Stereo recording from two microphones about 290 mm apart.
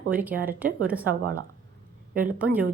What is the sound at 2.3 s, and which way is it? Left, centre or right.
Speech, centre.